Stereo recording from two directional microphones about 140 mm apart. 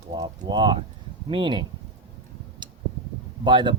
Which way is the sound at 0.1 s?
30° right (ahead or behind).